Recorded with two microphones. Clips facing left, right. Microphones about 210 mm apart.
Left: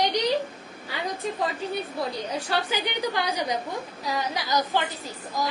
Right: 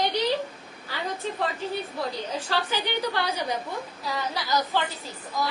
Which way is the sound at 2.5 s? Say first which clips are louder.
Even; 15° left (ahead or behind).